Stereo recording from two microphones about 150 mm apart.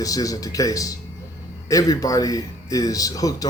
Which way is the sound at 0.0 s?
25° left (ahead or behind).